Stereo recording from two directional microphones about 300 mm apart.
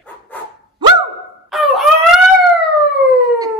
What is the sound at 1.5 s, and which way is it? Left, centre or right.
Fowl, centre.